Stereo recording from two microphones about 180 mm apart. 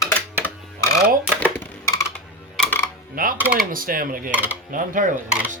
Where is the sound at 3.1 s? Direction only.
50° right (ahead or behind).